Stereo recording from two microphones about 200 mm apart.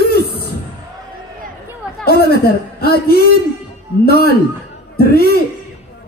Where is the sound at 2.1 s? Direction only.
50° left (ahead or behind).